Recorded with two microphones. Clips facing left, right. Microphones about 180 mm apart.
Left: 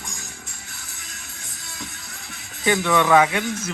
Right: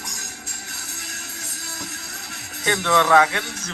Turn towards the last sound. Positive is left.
turn(degrees=15)  # may be behind; listen again after turning